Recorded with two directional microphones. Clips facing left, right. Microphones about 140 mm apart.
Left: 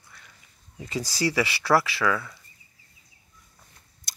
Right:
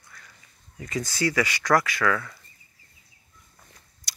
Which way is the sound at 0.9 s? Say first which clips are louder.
Even; 30° left (ahead or behind).